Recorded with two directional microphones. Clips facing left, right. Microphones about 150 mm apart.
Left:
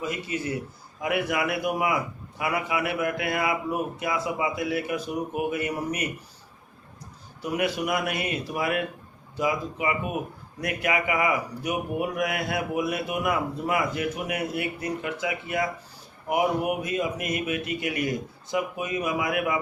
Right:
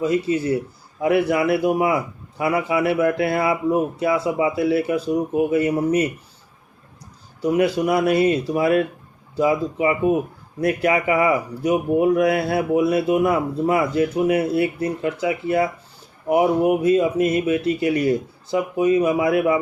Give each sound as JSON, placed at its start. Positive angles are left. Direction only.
{"t": 0.0, "sound": "speech", "side_deg": -30}
{"t": 7.5, "sound": "speech", "side_deg": -30}